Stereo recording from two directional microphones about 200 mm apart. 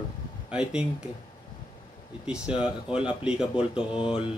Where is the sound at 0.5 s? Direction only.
5° right (ahead or behind).